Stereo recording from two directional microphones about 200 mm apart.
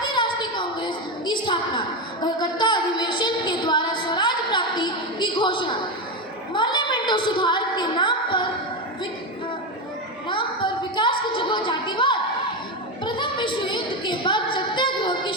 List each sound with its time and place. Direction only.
0.1 s a woman's voice: 25° left (ahead or behind)
10.2 s a woman's voice: 25° left (ahead or behind)
13.1 s a sound: 25° left (ahead or behind)